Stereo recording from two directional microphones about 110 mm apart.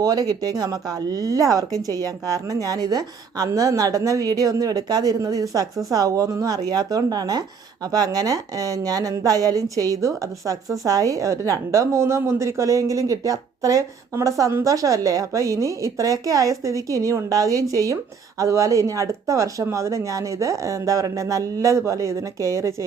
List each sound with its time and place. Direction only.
0.0 s speech: 35° right (ahead or behind)